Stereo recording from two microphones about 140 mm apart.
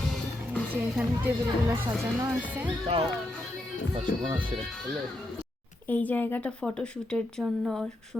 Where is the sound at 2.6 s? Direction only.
45° right (ahead or behind).